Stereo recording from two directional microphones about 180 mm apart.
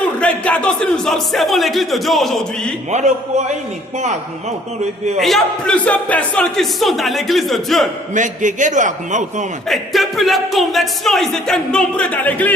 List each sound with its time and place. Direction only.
0.0 s speech: 5° left (ahead or behind)
2.9 s speech: 40° right (ahead or behind)
5.2 s speech: 5° left (ahead or behind)
8.1 s a man's voice: 45° right (ahead or behind)
9.6 s speech: centre (ahead or behind)